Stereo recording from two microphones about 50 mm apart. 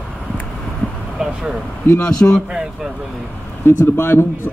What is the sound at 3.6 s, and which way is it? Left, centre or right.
Speech, left.